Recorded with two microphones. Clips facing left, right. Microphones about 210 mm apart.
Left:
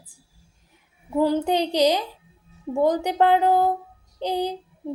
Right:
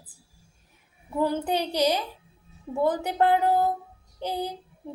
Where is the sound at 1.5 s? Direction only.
15° left (ahead or behind).